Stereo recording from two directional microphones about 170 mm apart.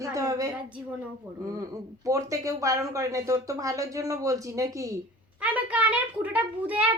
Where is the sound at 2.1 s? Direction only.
20° right (ahead or behind).